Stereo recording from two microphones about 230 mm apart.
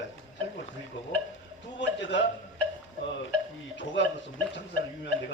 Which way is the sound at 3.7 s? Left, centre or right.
Left.